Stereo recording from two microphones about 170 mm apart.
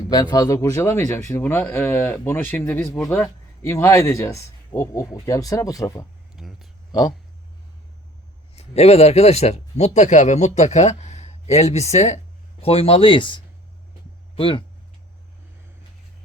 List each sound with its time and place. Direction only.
0.1 s speech: 25° left (ahead or behind)
6.3 s speech: centre (ahead or behind)
8.5 s speech: 40° left (ahead or behind)